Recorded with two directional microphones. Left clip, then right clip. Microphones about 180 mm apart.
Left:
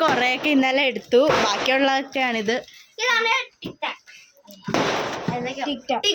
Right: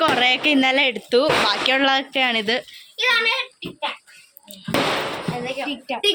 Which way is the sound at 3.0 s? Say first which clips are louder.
Right 2 dB; 15° right (ahead or behind).